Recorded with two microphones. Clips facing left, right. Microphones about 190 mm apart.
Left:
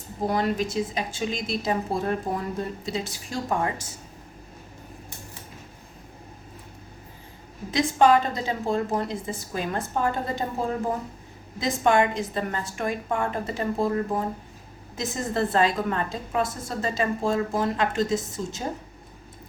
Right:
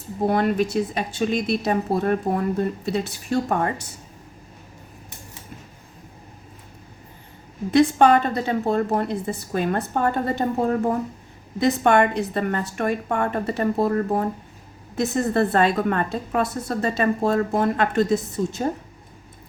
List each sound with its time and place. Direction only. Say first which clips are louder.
0.3 s a woman's voice: right 4 dB; 60° right (ahead or behind)
7.7 s a woman's voice: right 4 dB; 60° right (ahead or behind)